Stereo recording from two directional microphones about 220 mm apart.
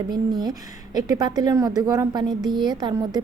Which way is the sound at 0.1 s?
20° right (ahead or behind).